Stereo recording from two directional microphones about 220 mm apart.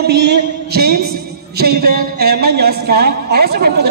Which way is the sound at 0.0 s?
50° right (ahead or behind).